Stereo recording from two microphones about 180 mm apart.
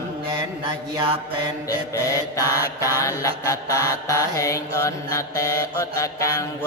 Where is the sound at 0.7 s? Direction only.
30° right (ahead or behind).